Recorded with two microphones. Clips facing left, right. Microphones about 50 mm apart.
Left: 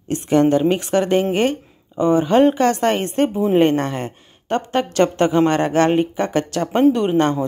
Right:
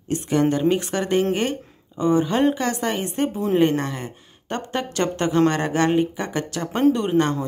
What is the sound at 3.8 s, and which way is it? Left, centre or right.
Speech, left.